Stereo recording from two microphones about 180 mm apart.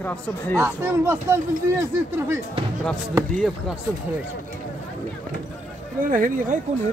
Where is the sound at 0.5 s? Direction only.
15° right (ahead or behind).